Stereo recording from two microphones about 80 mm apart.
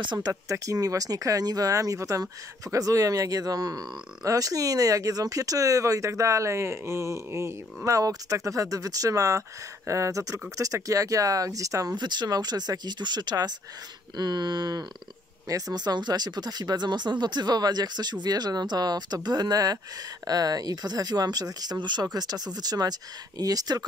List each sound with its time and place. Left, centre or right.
0.0 s speech: right
0.3 s speech: right
12.0 s speech: right
15.4 s speech: right